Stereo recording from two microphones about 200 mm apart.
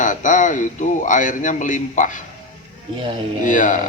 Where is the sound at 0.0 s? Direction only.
40° left (ahead or behind).